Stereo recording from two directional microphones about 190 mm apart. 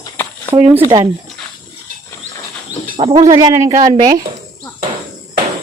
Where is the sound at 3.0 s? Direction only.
30° right (ahead or behind).